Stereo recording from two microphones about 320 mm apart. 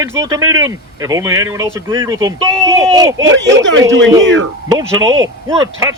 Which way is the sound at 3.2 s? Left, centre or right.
Right.